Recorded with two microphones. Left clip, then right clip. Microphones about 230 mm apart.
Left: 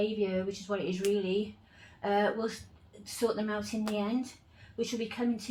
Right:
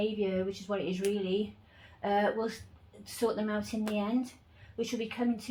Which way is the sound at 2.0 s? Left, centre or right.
Centre.